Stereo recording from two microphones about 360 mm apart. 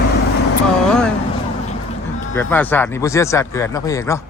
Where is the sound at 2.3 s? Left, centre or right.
Centre.